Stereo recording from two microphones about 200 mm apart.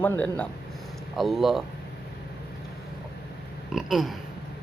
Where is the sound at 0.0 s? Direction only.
10° left (ahead or behind).